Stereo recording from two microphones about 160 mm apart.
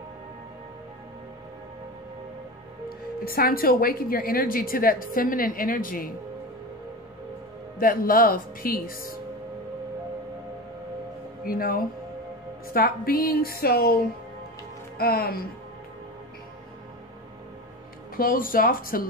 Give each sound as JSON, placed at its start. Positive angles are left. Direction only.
{"t": 3.3, "sound": "a woman's voice", "side_deg": 65}
{"t": 7.8, "sound": "a woman's voice", "side_deg": 65}
{"t": 11.4, "sound": "speech", "side_deg": 65}
{"t": 18.1, "sound": "a woman's voice", "side_deg": 65}